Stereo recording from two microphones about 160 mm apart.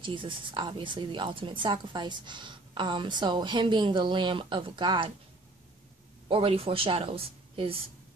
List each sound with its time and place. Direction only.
0.0 s a woman's voice: 30° right (ahead or behind)
6.2 s a woman's voice: 35° right (ahead or behind)